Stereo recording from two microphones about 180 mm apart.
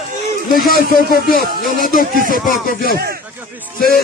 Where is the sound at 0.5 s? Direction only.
55° left (ahead or behind).